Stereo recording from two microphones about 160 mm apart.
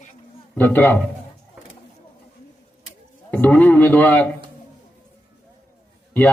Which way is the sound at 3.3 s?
10° left (ahead or behind).